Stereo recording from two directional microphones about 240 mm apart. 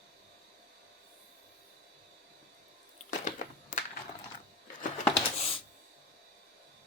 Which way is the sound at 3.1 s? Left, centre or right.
Left.